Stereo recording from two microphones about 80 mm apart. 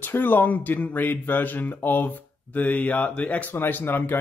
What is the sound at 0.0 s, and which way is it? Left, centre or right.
Speech, left.